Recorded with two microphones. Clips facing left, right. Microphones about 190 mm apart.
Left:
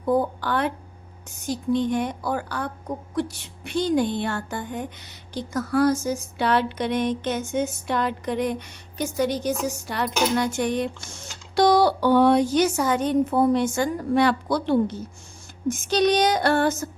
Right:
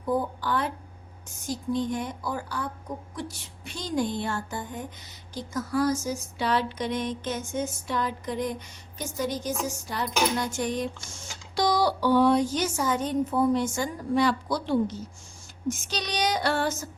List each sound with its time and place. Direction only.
0.0 s speech: 65° left (ahead or behind)
15.7 s female singing: 55° left (ahead or behind)